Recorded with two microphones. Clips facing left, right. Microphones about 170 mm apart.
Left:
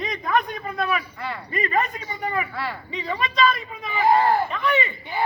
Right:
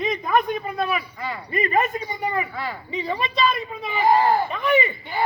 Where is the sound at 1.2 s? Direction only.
Centre (ahead or behind).